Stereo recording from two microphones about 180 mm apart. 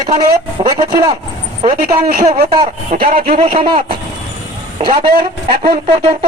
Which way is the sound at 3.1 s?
50° right (ahead or behind).